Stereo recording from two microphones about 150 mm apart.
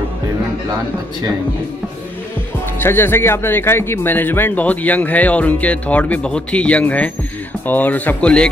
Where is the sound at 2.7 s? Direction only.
15° left (ahead or behind).